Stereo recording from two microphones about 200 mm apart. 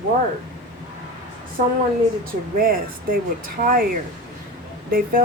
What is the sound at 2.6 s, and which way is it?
Speech, 45° right (ahead or behind).